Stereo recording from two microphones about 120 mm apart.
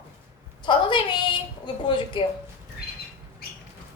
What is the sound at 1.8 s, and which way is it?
Speech, 40° left (ahead or behind).